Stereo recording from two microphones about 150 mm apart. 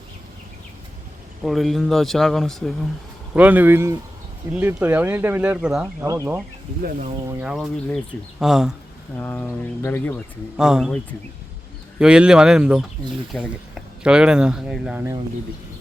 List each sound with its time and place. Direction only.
1.5 s speech: centre (ahead or behind)
3.3 s speech: 10° right (ahead or behind)
6.1 s speech: 15° right (ahead or behind)
7.4 s speech: 5° right (ahead or behind)
9.1 s speech: 10° left (ahead or behind)
10.6 s speech: 5° right (ahead or behind)